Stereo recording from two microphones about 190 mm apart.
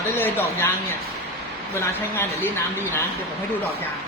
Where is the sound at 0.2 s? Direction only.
10° left (ahead or behind).